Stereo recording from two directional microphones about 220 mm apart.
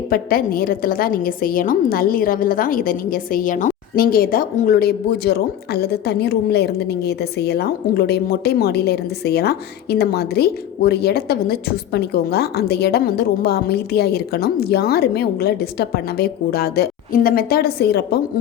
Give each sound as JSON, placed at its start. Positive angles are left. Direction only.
{"t": 0.1, "sound": "a woman's voice", "side_deg": 40}